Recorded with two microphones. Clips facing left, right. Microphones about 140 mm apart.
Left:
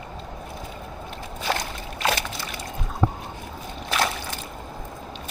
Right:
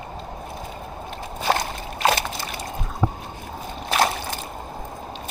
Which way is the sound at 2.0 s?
35° right (ahead or behind).